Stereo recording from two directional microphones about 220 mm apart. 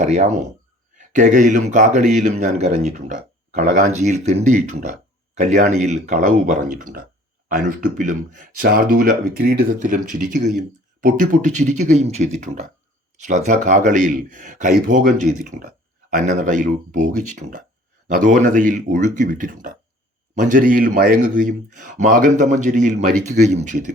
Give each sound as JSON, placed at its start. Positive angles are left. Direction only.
{"t": 0.0, "sound": "a man's voice", "side_deg": -30}